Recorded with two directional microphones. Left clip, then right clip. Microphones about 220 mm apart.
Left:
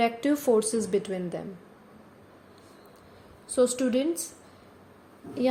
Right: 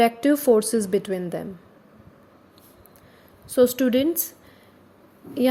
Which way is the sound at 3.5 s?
35° right (ahead or behind).